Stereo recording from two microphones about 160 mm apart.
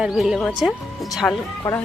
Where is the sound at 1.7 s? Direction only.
20° left (ahead or behind).